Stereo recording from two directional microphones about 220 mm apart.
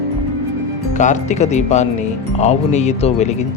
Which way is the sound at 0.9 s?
35° left (ahead or behind).